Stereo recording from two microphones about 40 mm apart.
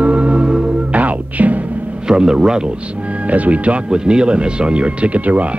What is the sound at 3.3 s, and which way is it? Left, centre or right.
Speech, right.